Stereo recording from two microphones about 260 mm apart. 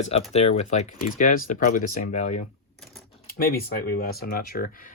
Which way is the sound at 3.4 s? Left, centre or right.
Left.